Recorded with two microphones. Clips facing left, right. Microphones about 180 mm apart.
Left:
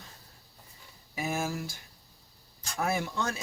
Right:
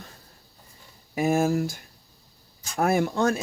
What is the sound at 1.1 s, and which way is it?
Speech, 50° right (ahead or behind).